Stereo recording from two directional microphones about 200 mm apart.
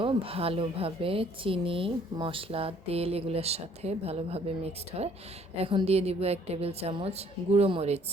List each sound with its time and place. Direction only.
0.0 s a woman's voice: 25° right (ahead or behind)